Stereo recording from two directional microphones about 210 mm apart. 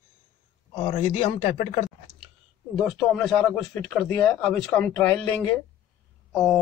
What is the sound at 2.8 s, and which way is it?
Speech, centre (ahead or behind).